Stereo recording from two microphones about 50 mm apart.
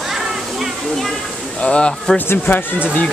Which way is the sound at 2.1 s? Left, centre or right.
Left.